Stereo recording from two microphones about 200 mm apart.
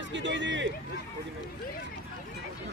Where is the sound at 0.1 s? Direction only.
65° right (ahead or behind).